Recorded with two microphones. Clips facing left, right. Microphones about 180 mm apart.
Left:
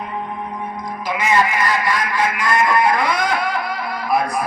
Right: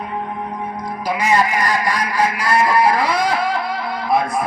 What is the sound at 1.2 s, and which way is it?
Speech, 40° right (ahead or behind).